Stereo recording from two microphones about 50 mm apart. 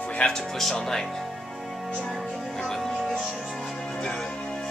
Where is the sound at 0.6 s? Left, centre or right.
Centre.